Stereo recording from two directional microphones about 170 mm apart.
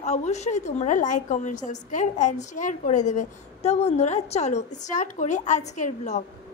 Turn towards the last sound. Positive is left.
turn(degrees=45)  # may be behind; listen again after turning